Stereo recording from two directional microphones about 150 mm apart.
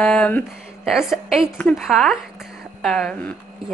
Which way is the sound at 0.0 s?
5° left (ahead or behind).